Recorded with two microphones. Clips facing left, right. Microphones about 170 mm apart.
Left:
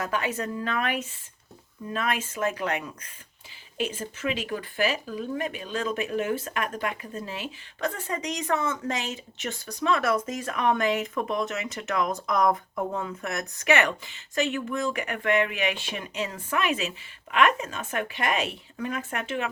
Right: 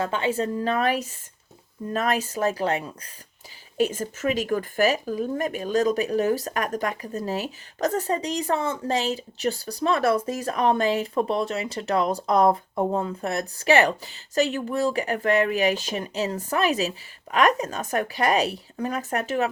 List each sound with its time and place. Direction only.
0.0 s speech: 30° right (ahead or behind)
3.8 s speech: 45° right (ahead or behind)